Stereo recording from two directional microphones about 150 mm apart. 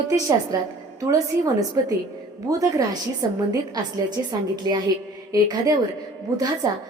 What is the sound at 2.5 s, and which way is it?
A woman's voice, 20° right (ahead or behind).